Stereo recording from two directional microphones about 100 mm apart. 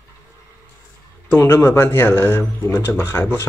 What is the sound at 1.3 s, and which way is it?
Speech, 20° left (ahead or behind).